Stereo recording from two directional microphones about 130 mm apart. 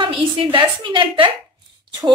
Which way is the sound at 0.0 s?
40° right (ahead or behind).